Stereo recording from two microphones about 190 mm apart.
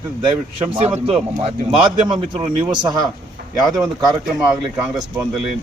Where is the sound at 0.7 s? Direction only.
30° right (ahead or behind).